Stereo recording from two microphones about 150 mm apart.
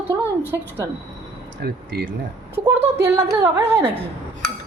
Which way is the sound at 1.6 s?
90° right.